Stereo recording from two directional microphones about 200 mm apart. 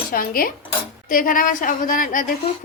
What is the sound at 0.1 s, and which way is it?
A woman's voice, 45° left (ahead or behind).